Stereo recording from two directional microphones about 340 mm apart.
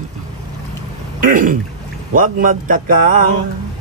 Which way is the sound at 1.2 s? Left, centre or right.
Right.